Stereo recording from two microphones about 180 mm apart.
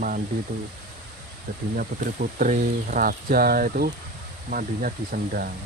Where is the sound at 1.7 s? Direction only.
50° right (ahead or behind).